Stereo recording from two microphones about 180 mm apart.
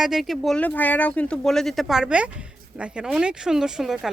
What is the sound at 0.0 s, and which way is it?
A woman's voice, centre (ahead or behind).